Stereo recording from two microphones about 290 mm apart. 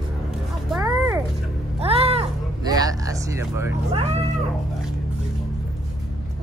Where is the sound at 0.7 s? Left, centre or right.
Centre.